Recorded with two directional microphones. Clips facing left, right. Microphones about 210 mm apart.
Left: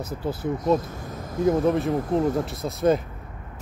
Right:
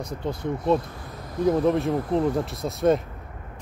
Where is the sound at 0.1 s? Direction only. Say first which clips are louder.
Left 1 dB; 5° left (ahead or behind).